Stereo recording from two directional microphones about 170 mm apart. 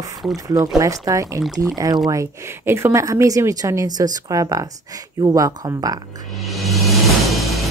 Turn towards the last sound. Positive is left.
turn(degrees=0)  # may be behind; listen again after turning